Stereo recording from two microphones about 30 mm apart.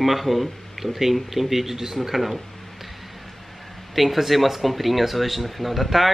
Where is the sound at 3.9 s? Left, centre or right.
Centre.